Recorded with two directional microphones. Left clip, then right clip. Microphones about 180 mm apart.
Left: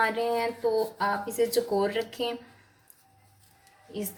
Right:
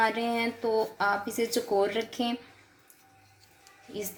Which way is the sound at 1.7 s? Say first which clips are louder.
Even; 50° right (ahead or behind).